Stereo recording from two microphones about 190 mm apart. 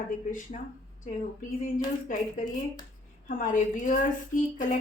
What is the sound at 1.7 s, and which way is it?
A woman's voice, 40° left (ahead or behind).